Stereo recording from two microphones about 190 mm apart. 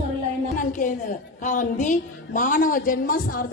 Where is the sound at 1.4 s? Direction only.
40° left (ahead or behind).